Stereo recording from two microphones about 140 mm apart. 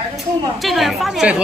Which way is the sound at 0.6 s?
Centre (ahead or behind).